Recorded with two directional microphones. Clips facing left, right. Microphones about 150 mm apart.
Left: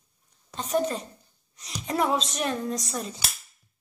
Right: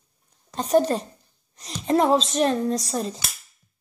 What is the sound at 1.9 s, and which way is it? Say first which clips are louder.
Speech: right 7 dB; 30° right (ahead or behind).